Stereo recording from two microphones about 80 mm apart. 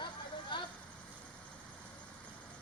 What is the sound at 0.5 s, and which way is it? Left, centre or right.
Vehicle, left.